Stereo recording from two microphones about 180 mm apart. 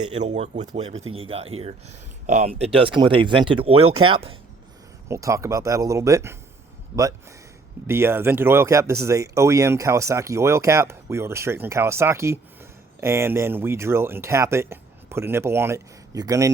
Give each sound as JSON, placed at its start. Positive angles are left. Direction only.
{"t": 0.1, "sound": "speech", "side_deg": -40}
{"t": 5.0, "sound": "speech", "side_deg": -15}